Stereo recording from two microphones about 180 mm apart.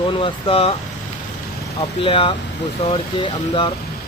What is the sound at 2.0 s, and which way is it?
Speech, 30° left (ahead or behind).